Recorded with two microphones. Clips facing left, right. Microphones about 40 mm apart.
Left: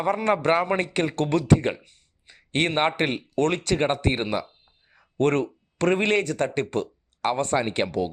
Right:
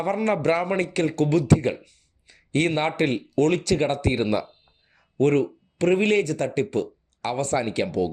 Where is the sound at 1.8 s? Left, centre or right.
Left.